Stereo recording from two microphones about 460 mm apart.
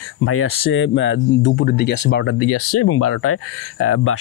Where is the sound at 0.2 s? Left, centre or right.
Left.